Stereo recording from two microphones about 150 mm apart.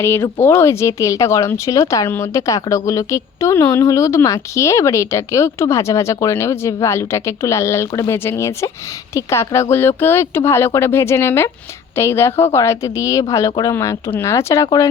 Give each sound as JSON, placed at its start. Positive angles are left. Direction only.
{"t": 0.0, "sound": "speech", "side_deg": 15}